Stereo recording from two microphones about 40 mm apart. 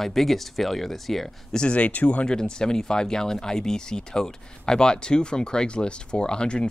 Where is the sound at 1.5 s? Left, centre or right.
Left.